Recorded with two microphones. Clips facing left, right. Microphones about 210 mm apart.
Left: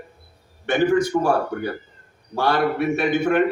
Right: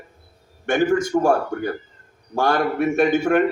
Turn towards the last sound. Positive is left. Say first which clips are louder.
# right 2 dB
turn(degrees=-45)  # may be behind; listen again after turning